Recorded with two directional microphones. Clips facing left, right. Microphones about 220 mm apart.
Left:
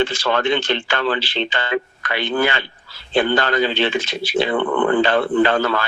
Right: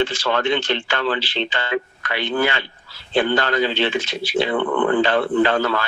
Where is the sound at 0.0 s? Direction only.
55° left (ahead or behind).